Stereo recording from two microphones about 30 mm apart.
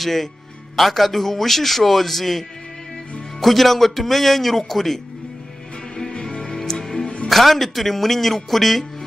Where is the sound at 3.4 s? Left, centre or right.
Centre.